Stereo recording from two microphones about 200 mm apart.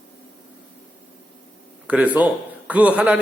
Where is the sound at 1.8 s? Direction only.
5° right (ahead or behind).